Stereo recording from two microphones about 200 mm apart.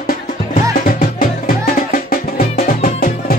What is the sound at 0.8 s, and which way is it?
Music, 45° left (ahead or behind).